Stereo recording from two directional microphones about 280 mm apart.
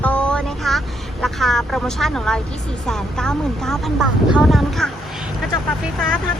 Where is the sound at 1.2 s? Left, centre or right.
Centre.